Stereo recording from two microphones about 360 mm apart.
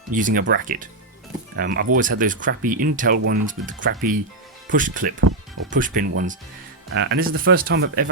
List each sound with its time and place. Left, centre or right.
0.1 s speech: right